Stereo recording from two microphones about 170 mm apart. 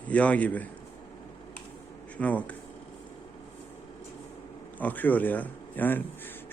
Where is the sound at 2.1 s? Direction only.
10° left (ahead or behind).